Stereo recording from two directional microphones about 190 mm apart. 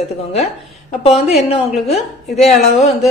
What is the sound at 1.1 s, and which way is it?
Speech, 30° left (ahead or behind).